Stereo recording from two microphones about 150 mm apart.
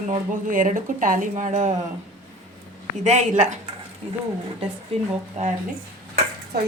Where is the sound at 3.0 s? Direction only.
50° right (ahead or behind).